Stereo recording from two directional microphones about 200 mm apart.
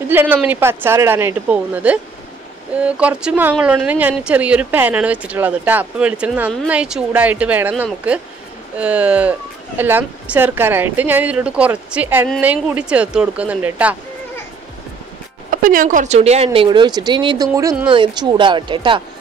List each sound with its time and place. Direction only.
0.1 s speech: 10° right (ahead or behind)
15.5 s speech: 45° right (ahead or behind); by 19.0 s 25° right (ahead or behind)